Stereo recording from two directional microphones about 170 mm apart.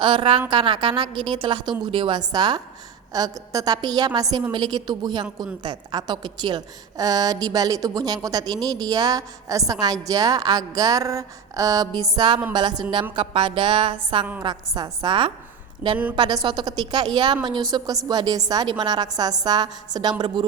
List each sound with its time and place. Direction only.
0.0 s a woman's voice: 30° right (ahead or behind)